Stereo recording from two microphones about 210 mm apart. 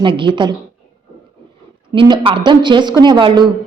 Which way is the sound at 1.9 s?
25° right (ahead or behind).